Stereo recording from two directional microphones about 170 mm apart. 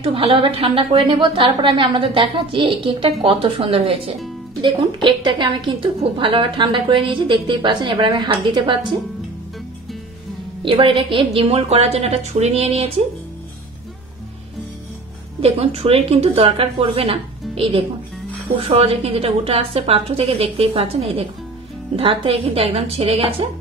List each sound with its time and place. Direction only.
0.0 s a woman's voice: 35° right (ahead or behind)
10.6 s a woman's voice: 30° right (ahead or behind)
15.4 s a woman's voice: 35° right (ahead or behind)